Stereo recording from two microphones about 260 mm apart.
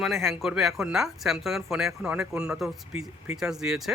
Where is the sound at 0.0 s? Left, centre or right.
Centre.